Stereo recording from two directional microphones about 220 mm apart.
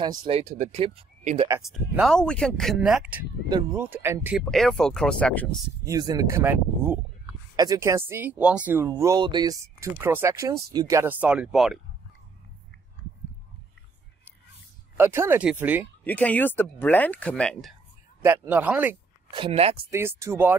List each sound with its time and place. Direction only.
0.0 s speech: 20° right (ahead or behind)
1.6 s speech: centre (ahead or behind)
5.9 s speech: 15° right (ahead or behind)
15.0 s speech: 10° right (ahead or behind)
16.0 s speech: 5° left (ahead or behind)
18.2 s speech: 10° right (ahead or behind)
19.3 s speech: 25° right (ahead or behind)
19.9 s speech: 10° right (ahead or behind)